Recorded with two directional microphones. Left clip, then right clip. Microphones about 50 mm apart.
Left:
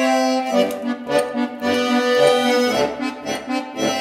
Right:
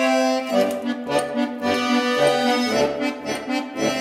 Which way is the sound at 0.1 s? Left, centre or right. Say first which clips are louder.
Left 1 dB; right.